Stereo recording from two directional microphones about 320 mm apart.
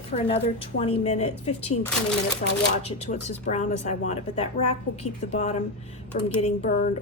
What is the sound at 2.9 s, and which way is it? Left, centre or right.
A woman's voice, centre.